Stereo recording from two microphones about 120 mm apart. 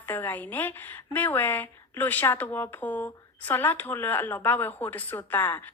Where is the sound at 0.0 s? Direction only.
15° left (ahead or behind).